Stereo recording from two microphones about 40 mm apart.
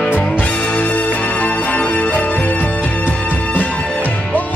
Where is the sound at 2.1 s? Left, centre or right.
Left.